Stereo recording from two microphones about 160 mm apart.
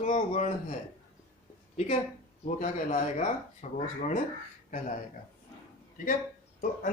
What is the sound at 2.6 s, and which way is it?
Speech, 50° left (ahead or behind).